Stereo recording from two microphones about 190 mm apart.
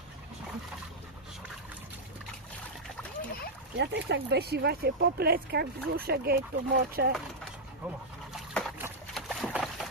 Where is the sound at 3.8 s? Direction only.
65° right (ahead or behind).